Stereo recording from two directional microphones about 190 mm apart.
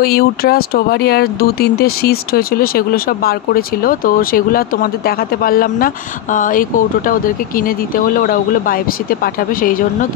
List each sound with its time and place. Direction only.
0.0 s speech: 55° left (ahead or behind)